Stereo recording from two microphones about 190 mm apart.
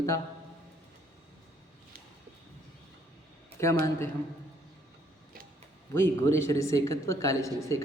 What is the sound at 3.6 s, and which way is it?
Speech, 15° left (ahead or behind).